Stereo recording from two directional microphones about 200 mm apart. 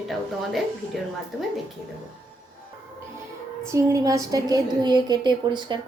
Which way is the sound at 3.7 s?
15° right (ahead or behind).